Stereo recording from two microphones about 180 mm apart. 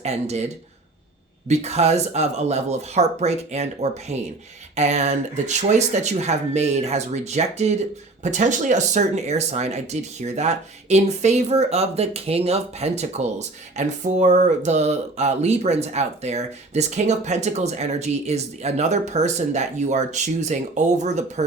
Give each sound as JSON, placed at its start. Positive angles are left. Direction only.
{"t": 0.0, "sound": "speech", "side_deg": -35}